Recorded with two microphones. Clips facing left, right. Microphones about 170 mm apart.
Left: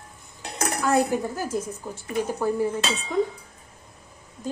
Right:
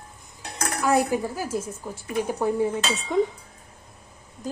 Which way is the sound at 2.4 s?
25° right (ahead or behind).